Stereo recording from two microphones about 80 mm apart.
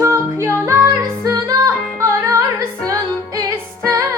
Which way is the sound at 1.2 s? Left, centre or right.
Right.